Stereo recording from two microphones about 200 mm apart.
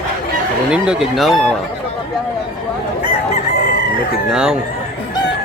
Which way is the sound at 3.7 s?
50° left (ahead or behind).